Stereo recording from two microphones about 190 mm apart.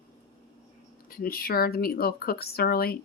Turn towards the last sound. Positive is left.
turn(degrees=55)  # may be behind; listen again after turning